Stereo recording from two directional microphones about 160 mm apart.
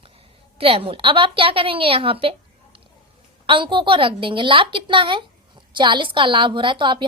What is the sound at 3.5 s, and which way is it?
A woman's voice, 30° right (ahead or behind).